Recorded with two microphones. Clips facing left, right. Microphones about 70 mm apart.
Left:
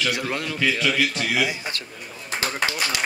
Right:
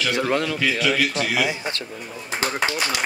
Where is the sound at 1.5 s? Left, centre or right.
Right.